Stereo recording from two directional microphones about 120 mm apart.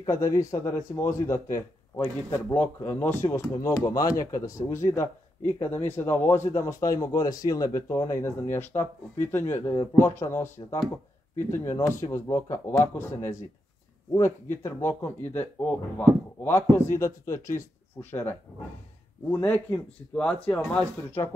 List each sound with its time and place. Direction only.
0.0 s speech: 25° left (ahead or behind)
19.3 s speech: 15° left (ahead or behind)